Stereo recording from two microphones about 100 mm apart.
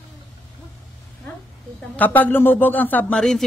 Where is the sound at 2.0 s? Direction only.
15° left (ahead or behind).